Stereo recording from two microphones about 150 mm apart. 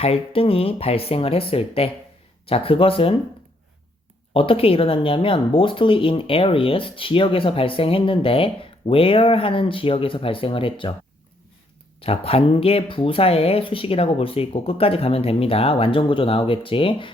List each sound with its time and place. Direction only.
0.0 s speech: 40° left (ahead or behind)
4.4 s speech: 40° left (ahead or behind)
11.9 s speech: 40° left (ahead or behind)